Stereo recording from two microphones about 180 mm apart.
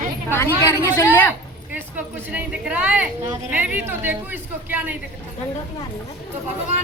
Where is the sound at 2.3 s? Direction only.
5° right (ahead or behind).